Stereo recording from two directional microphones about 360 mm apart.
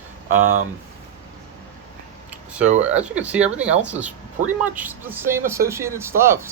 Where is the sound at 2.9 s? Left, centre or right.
Centre.